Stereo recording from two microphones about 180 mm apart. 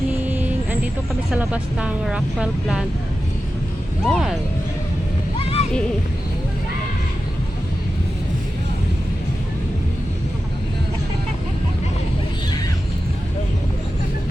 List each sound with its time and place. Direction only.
0.3 s vehicle: 10° right (ahead or behind)
1.3 s speech: 5° right (ahead or behind)
4.0 s speech: centre (ahead or behind)
5.4 s a sound: 30° left (ahead or behind)